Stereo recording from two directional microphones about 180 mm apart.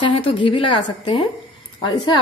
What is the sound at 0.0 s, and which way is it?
Speech, 30° left (ahead or behind).